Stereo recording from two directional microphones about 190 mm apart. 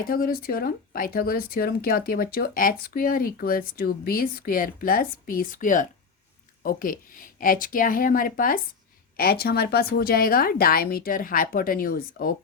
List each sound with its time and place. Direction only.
0.1 s speech: 50° left (ahead or behind)